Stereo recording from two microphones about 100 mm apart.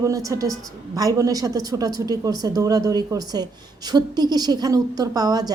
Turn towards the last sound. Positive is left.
turn(degrees=-40)  # may be behind; listen again after turning